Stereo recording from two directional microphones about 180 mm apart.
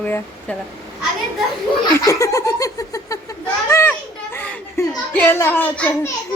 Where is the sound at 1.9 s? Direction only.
15° left (ahead or behind).